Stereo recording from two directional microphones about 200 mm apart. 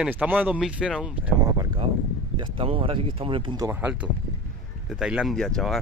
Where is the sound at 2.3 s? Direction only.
25° right (ahead or behind).